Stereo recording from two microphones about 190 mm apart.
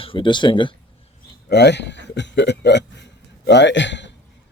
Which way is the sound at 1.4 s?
60° left (ahead or behind).